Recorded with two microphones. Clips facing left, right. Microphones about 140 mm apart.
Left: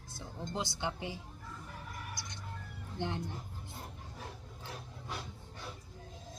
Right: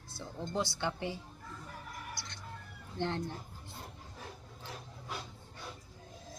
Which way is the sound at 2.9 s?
15° left (ahead or behind).